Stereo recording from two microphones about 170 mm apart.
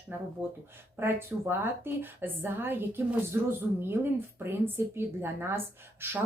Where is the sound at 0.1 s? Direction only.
10° right (ahead or behind).